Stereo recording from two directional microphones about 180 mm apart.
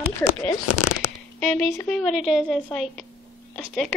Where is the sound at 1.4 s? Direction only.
5° left (ahead or behind).